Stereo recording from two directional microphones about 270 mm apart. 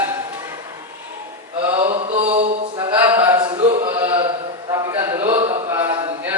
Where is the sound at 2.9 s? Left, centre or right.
Centre.